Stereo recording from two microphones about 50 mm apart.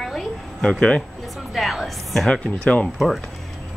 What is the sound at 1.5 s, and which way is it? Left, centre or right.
Music, centre.